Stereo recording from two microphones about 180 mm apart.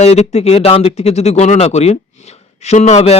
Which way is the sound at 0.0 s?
35° left (ahead or behind).